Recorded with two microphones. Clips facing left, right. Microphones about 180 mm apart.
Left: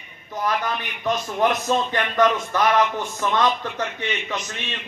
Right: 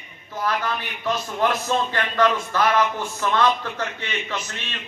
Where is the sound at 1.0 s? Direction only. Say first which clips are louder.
Left 2 dB; 15° left (ahead or behind).